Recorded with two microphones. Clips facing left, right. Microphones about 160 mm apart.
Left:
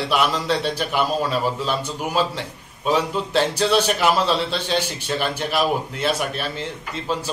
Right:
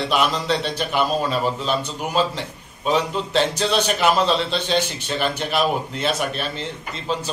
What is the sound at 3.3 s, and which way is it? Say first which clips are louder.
A man's voice: left 1 dB; 10° left (ahead or behind).